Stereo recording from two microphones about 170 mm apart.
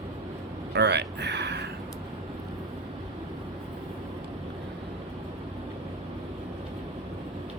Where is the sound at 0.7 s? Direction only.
90° right.